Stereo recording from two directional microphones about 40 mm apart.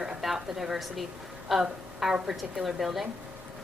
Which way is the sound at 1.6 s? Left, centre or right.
Centre.